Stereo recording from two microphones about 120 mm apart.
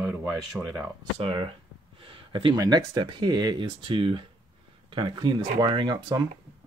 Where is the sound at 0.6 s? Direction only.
25° right (ahead or behind).